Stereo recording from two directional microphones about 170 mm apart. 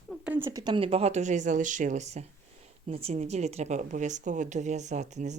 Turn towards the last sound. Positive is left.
turn(degrees=-45)  # may be behind; listen again after turning